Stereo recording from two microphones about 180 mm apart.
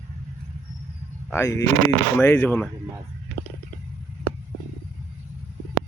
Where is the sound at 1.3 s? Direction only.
15° left (ahead or behind).